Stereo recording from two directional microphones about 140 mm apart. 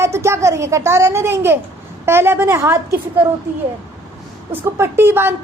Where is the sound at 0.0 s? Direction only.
20° right (ahead or behind).